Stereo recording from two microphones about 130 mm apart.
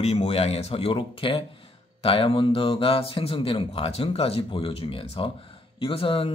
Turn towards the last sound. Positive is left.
turn(degrees=45)  # may be behind; listen again after turning